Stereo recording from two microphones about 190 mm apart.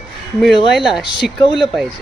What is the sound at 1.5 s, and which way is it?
Speech, centre (ahead or behind).